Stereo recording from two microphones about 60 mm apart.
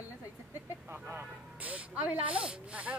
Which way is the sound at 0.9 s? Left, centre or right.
Right.